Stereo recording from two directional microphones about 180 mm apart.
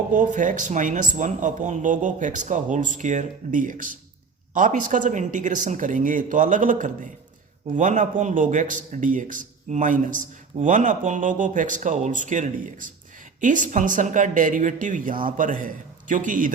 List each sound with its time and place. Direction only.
0.1 s a man's voice: 45° right (ahead or behind)